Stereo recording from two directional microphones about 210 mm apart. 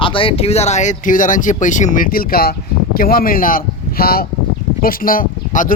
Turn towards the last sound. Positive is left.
turn(degrees=40)  # may be behind; listen again after turning